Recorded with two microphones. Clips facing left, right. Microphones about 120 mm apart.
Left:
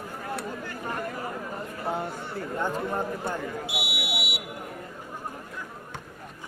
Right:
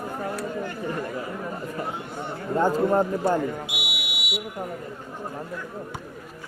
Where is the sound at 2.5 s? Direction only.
40° right (ahead or behind).